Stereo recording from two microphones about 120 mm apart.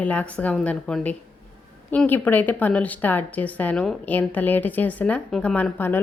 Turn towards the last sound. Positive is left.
turn(degrees=15)  # may be behind; listen again after turning